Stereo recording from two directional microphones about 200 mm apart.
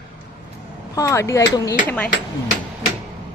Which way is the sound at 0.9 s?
15° left (ahead or behind).